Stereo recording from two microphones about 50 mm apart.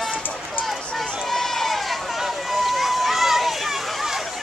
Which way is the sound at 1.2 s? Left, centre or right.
Centre.